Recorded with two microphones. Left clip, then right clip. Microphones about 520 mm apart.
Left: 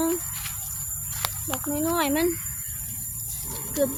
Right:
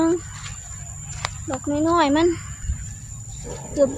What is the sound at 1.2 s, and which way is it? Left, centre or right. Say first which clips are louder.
Speech: right 3 dB; left.